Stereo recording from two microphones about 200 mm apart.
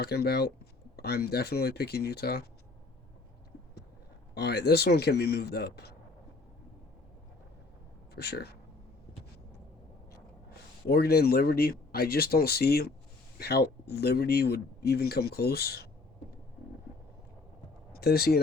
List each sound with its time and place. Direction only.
0.0 s speech: 50° left (ahead or behind)
4.4 s speech: 55° left (ahead or behind)
8.1 s speech: 50° left (ahead or behind)
10.8 s speech: 50° left (ahead or behind)
17.9 s speech: 50° left (ahead or behind)